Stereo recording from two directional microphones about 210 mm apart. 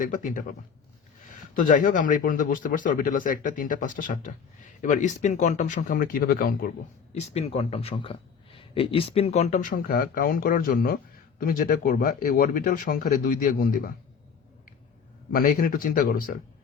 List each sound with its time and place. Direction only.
0.0 s a man's voice: 40° left (ahead or behind)
1.5 s a man's voice: 40° left (ahead or behind)
7.1 s a man's voice: 30° left (ahead or behind)
15.3 s speech: 40° left (ahead or behind)